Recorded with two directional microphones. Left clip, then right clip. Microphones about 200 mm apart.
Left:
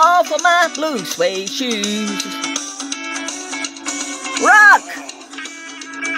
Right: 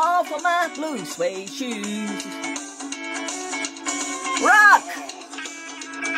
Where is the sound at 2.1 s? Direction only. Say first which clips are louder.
Left 7 dB; 50° left (ahead or behind).